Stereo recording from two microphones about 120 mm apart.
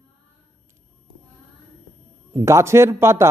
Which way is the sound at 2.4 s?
25° right (ahead or behind).